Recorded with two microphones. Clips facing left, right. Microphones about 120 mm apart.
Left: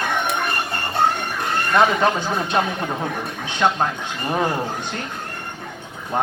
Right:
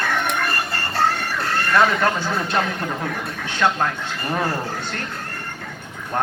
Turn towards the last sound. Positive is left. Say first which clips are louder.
# left 2 dB
turn(degrees=15)  # may be behind; listen again after turning